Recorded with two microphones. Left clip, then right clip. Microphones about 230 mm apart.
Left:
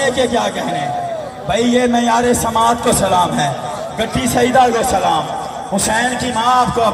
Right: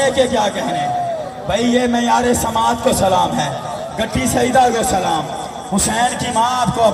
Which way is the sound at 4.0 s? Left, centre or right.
Right.